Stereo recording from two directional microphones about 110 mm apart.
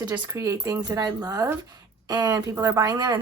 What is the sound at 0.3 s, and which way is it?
Speech, 30° right (ahead or behind).